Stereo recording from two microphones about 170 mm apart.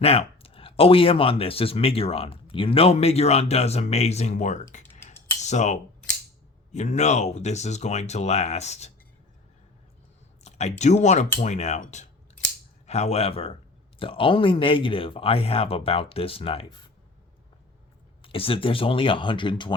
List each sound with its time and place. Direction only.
0.0 s speech: 35° left (ahead or behind)
10.4 s speech: 40° left (ahead or behind)
18.2 s speech: 35° left (ahead or behind)